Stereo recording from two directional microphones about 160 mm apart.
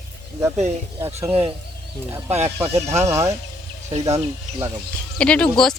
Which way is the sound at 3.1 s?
20° right (ahead or behind).